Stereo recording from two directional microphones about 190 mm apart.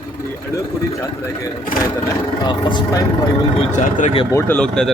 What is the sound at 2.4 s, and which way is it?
Speech, 25° left (ahead or behind).